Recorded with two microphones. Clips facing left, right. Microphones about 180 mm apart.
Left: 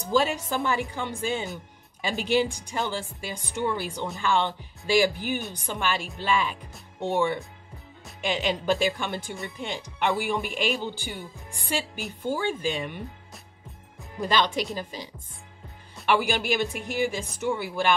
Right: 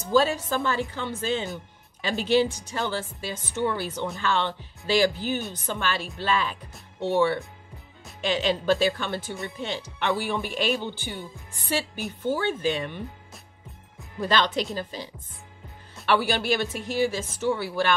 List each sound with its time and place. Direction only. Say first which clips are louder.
0.0 s speech: right 2 dB; 15° left (ahead or behind)
14.2 s speech: right 1 dB; 10° left (ahead or behind)
16.1 s speech: right 1 dB; 15° left (ahead or behind)